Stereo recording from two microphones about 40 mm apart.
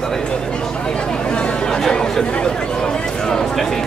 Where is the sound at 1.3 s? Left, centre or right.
Centre.